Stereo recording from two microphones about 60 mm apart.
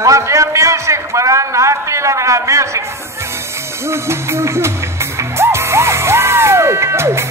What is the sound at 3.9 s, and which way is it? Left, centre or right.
Music, right.